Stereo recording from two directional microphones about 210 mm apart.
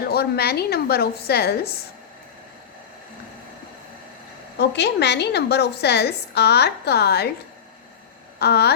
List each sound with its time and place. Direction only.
0.1 s a woman's voice: 50° left (ahead or behind)
4.5 s a woman's voice: 55° left (ahead or behind)
8.4 s a woman's voice: 50° left (ahead or behind)